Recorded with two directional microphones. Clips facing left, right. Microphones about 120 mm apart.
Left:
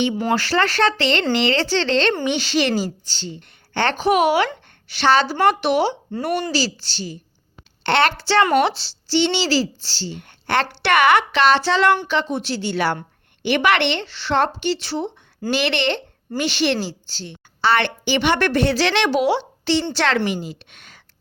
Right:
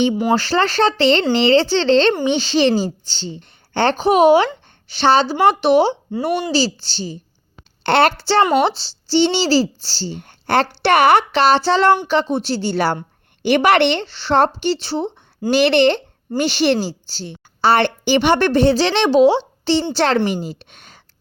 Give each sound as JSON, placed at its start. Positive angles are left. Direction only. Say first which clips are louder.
{"t": 0.3, "sound": "a woman's voice", "louder": "right 2 dB", "side_deg": -30}
{"t": 6.1, "sound": "speech", "louder": "right 4 dB", "side_deg": -10}
{"t": 6.5, "sound": "a woman's voice", "louder": "right 4 dB", "side_deg": -30}
{"t": 7.9, "sound": "a woman's voice", "louder": "right 4 dB", "side_deg": -45}
{"t": 8.2, "sound": "a woman's voice", "louder": "right 2 dB", "side_deg": -30}